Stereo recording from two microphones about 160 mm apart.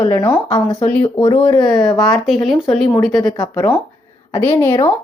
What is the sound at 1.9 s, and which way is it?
A woman's voice, centre (ahead or behind).